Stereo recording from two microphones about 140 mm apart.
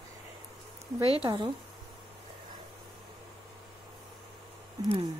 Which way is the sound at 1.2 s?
35° right (ahead or behind).